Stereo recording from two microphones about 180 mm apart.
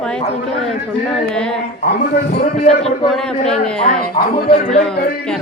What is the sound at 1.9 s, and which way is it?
Speech, 65° left (ahead or behind).